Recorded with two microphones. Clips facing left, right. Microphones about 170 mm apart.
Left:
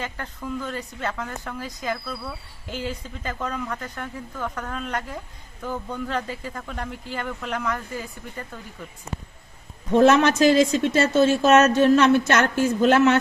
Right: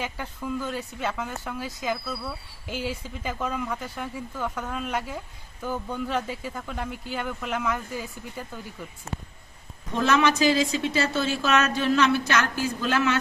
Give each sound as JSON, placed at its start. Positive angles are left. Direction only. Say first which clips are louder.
{"t": 0.0, "sound": "speech", "louder": "even", "side_deg": -10}
{"t": 9.9, "sound": "speech", "louder": "left 6 dB", "side_deg": 50}